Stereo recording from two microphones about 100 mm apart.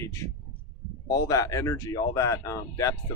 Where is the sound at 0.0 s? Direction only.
30° left (ahead or behind).